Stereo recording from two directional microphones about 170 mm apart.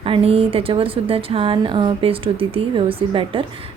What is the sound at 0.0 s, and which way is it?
A woman's voice, 35° right (ahead or behind).